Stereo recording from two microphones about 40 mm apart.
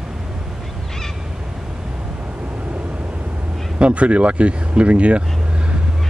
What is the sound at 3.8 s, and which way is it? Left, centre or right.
Speech, right.